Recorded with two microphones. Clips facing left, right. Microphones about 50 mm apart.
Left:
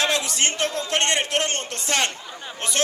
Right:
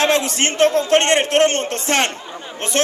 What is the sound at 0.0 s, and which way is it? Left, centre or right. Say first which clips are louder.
A man's voice: right 6 dB; right.